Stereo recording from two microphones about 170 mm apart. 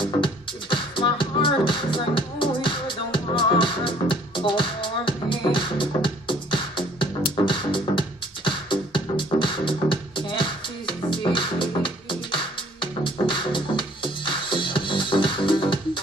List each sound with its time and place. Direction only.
0.0 s music: 30° left (ahead or behind)